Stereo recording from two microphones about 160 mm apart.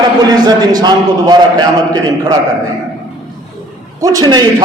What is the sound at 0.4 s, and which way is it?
Speech, 25° right (ahead or behind).